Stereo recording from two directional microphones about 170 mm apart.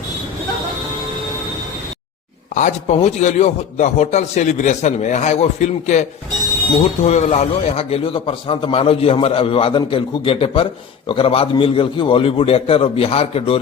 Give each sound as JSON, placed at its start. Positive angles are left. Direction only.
{"t": 2.6, "sound": "a man's voice", "side_deg": 45}